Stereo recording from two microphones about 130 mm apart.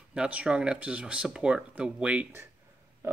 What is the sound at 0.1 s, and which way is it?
Speech, 10° right (ahead or behind).